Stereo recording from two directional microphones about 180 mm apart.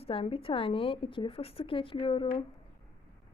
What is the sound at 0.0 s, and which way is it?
A woman's voice, 30° left (ahead or behind).